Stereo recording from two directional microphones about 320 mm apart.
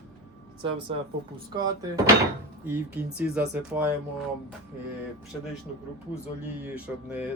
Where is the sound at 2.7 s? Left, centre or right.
Centre.